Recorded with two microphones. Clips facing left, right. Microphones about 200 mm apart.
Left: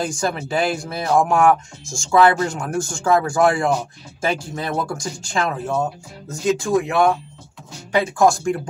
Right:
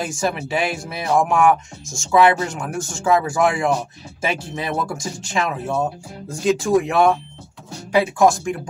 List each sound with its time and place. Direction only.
0.0 s speech: centre (ahead or behind)
6.6 s speech: 15° right (ahead or behind)
8.2 s speech: centre (ahead or behind)